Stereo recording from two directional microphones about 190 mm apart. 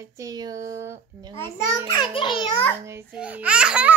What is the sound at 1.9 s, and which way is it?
Speech, 25° left (ahead or behind).